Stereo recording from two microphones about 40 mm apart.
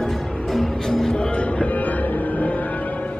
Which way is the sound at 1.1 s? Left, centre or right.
Left.